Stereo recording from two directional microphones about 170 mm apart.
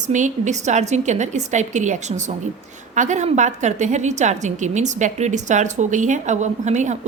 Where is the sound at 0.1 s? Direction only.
45° right (ahead or behind).